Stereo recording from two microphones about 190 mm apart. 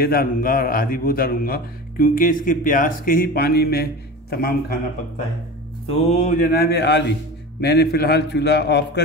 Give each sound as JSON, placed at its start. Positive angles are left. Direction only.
{"t": 0.0, "sound": "a man's voice", "side_deg": 50}
{"t": 5.9, "sound": "a man's voice", "side_deg": 35}